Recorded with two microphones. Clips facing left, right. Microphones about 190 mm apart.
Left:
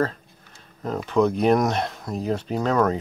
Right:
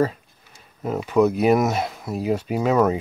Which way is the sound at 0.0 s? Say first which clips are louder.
Right 3 dB; 10° right (ahead or behind).